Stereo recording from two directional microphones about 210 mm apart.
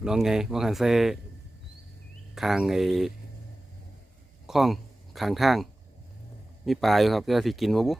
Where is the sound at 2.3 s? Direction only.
Centre (ahead or behind).